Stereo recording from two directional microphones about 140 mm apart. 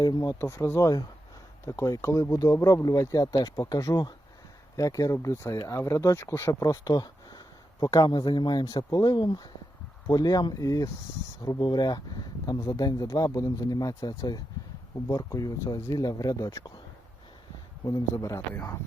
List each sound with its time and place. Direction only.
0.0 s speech: 30° left (ahead or behind)
0.4 s speech: 15° left (ahead or behind)
17.8 s speech: 25° left (ahead or behind)